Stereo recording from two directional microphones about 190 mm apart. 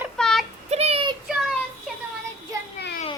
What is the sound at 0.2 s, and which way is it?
Child singing, centre (ahead or behind).